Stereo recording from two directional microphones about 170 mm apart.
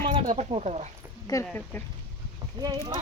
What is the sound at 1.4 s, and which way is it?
Speech, 10° left (ahead or behind).